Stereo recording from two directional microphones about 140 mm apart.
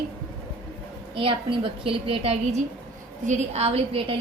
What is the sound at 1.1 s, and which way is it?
A woman's voice, 40° right (ahead or behind).